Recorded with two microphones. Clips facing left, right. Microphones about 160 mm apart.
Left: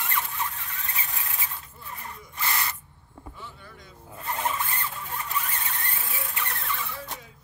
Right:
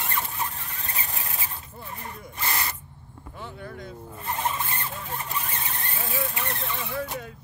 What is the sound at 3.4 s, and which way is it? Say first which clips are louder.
Vehicle: right 7 dB; 60° right (ahead or behind).